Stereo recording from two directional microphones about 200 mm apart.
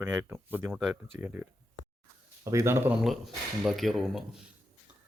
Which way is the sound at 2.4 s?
15° right (ahead or behind).